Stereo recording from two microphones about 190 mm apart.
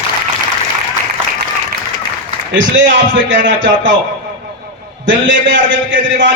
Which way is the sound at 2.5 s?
80° right.